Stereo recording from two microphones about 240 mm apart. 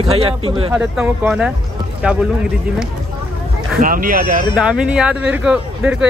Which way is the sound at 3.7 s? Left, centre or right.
Right.